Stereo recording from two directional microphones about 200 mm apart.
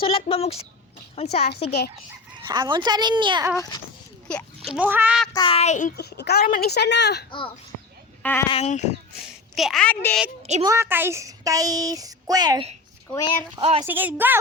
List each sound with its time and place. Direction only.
0.0 s a woman's voice: 25° left (ahead or behind)
2.4 s speech: 25° right (ahead or behind)
3.5 s speech: 15° left (ahead or behind)
4.3 s a child's voice: centre (ahead or behind)
5.3 s a child's voice: 25° left (ahead or behind)
6.0 s speech: 55° left (ahead or behind)
7.3 s a child's voice: 25° left (ahead or behind)
8.2 s speech: 10° left (ahead or behind)
8.4 s a child's voice: 30° left (ahead or behind)
9.6 s a child's voice: centre (ahead or behind)
10.6 s speech: 15° right (ahead or behind)
13.1 s speech: 15° left (ahead or behind)
13.6 s speech: 30° right (ahead or behind)
13.8 s speech: 10° right (ahead or behind)